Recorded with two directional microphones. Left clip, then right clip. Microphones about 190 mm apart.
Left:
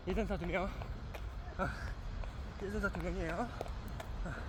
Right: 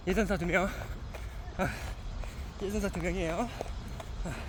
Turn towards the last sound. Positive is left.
turn(degrees=-60)  # may be behind; listen again after turning